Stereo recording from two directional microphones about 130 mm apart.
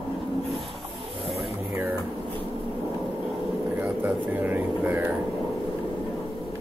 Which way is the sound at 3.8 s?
15° right (ahead or behind).